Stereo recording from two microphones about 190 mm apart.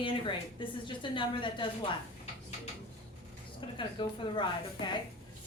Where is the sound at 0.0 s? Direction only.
25° left (ahead or behind).